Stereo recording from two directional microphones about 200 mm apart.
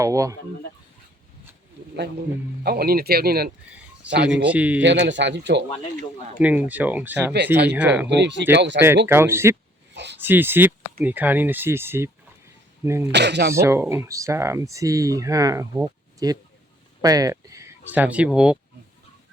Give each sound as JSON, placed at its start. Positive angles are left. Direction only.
{"t": 0.0, "sound": "speech", "side_deg": -15}
{"t": 2.6, "sound": "speech", "side_deg": -50}
{"t": 4.4, "sound": "speech", "side_deg": -5}
{"t": 4.8, "sound": "speech", "side_deg": -65}
{"t": 6.4, "sound": "speech", "side_deg": -10}
{"t": 8.0, "sound": "speech", "side_deg": -60}
{"t": 9.0, "sound": "speech", "side_deg": -10}
{"t": 9.9, "sound": "a sound", "side_deg": -60}
{"t": 10.2, "sound": "speech", "side_deg": -10}
{"t": 13.1, "sound": "speech", "side_deg": -60}
{"t": 13.5, "sound": "speech", "side_deg": -15}